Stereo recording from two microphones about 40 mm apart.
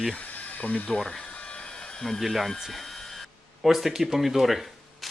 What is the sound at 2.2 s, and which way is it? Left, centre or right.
Speech, centre.